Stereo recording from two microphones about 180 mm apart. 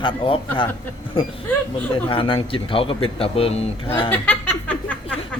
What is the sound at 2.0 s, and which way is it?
Speech, 30° left (ahead or behind).